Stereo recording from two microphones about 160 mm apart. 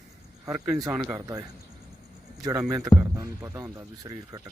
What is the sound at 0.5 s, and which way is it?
Speech, 5° right (ahead or behind).